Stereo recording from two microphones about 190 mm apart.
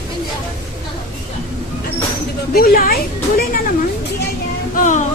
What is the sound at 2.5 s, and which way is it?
Speech, 50° left (ahead or behind).